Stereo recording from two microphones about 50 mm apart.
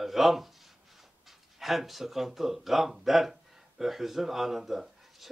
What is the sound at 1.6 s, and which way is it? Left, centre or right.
Speech, centre.